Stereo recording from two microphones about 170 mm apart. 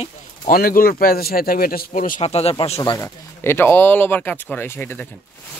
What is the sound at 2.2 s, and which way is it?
Speech, 35° left (ahead or behind).